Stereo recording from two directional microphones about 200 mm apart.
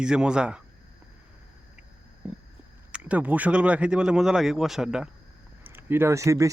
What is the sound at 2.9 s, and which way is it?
Speech, 5° right (ahead or behind).